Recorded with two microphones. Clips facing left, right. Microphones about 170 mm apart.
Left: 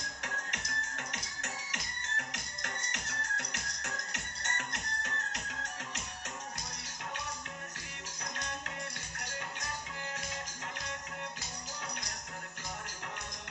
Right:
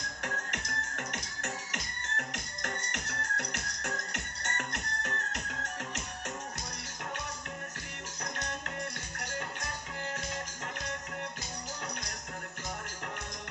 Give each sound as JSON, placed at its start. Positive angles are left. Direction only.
{"t": 0.2, "sound": "music", "side_deg": -50}